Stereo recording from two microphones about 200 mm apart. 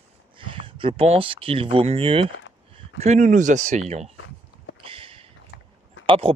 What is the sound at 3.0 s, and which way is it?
Speech, 35° right (ahead or behind).